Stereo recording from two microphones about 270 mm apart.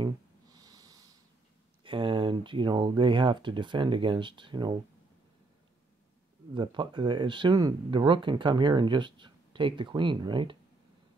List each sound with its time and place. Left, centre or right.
0.0 s snort: centre
1.9 s speech: centre
6.5 s speech: centre